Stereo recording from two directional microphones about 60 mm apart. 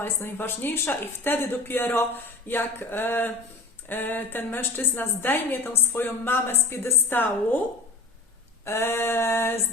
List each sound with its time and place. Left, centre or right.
0.0 s a woman's voice: left
8.6 s female singing: left